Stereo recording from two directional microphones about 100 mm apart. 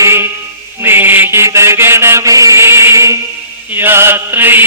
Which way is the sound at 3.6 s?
20° right (ahead or behind).